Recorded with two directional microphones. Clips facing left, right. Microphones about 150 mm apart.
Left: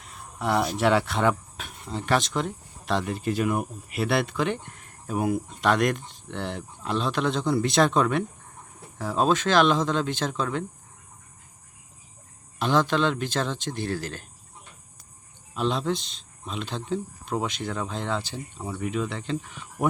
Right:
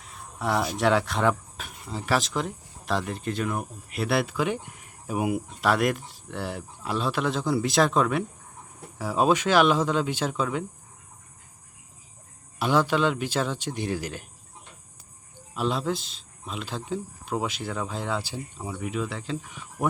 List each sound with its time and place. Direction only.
0.0 s speech: centre (ahead or behind)
12.5 s speech: 10° right (ahead or behind)
15.5 s speech: 5° right (ahead or behind)